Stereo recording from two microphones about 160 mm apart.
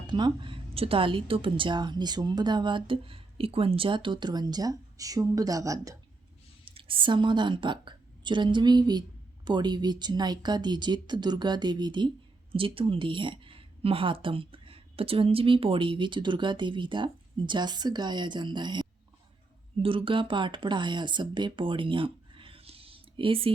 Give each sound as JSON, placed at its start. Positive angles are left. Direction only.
{"t": 0.1, "sound": "a woman's voice", "side_deg": -30}
{"t": 6.7, "sound": "a woman's voice", "side_deg": -35}